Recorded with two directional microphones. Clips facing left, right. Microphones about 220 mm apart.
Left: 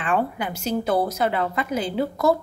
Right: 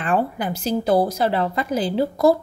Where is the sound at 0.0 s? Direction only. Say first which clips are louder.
Right 2 dB; 35° right (ahead or behind).